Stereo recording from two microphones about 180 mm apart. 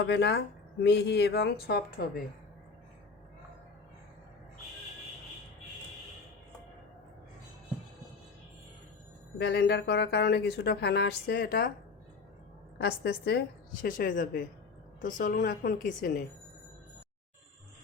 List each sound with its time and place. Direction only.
0.0 s speech: 70° left (ahead or behind)
9.4 s speech: 65° left (ahead or behind)
12.8 s speech: 65° left (ahead or behind)
13.8 s a woman's voice: 50° left (ahead or behind)